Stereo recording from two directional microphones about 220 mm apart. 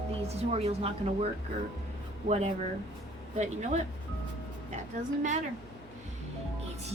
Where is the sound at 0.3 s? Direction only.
30° right (ahead or behind).